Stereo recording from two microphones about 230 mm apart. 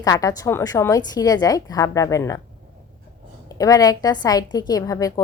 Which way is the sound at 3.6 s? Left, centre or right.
Centre.